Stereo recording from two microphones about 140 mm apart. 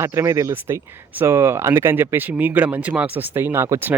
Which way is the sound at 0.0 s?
20° right (ahead or behind).